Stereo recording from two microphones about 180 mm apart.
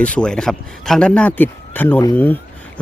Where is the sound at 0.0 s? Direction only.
5° left (ahead or behind).